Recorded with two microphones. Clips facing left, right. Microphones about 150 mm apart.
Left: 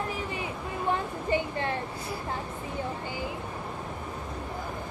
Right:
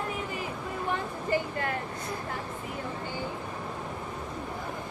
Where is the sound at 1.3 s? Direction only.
25° left (ahead or behind).